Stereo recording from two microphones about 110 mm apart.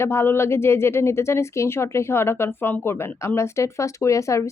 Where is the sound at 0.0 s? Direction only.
25° left (ahead or behind).